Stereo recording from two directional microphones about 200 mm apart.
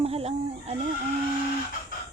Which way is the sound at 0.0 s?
30° right (ahead or behind).